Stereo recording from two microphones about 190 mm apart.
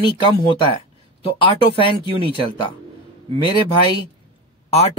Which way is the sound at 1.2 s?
30° left (ahead or behind).